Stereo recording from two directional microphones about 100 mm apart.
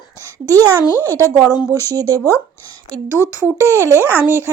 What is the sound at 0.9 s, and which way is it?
Speech, 20° left (ahead or behind).